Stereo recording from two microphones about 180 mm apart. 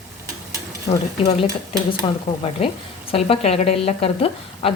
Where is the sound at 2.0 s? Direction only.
30° left (ahead or behind).